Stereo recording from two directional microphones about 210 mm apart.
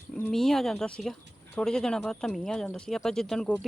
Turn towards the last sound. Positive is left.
turn(degrees=0)  # may be behind; listen again after turning